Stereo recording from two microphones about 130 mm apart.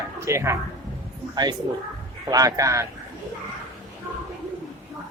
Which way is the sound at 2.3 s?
25° right (ahead or behind).